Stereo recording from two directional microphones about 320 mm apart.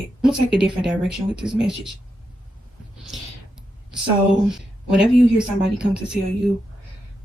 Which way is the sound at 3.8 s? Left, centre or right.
Centre.